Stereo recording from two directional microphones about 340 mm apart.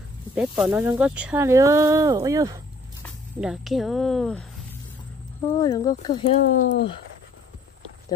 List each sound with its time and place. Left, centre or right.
0.3 s speech: centre
5.5 s speech: centre; by 6.9 s left